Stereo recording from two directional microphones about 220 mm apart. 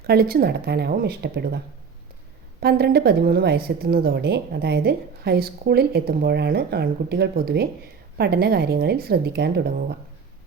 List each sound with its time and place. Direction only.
0.0 s a woman's voice: 45° right (ahead or behind)